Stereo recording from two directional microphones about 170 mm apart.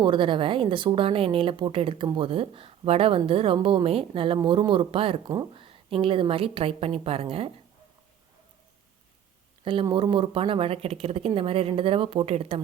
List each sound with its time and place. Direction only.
0.0 s speech: 30° right (ahead or behind)
9.8 s speech: 30° right (ahead or behind)